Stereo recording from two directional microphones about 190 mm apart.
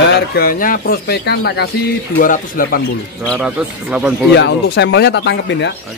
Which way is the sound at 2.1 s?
45° left (ahead or behind).